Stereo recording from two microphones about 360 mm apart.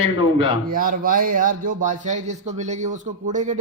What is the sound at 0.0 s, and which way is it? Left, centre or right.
Speech, left.